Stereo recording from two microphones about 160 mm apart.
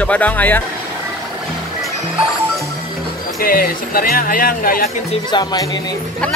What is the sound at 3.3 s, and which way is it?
Speech, 65° left (ahead or behind).